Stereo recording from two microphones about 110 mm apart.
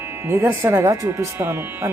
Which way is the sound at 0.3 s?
25° right (ahead or behind).